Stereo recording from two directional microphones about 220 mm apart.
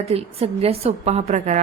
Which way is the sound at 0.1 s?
25° right (ahead or behind).